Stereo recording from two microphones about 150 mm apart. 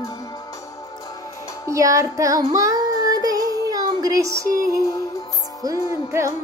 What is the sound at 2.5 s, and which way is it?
Child singing, 25° right (ahead or behind).